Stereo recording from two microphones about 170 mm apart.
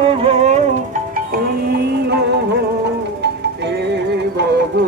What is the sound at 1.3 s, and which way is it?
Music, 65° right (ahead or behind).